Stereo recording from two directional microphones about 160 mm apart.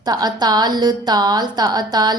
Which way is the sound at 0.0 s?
25° right (ahead or behind).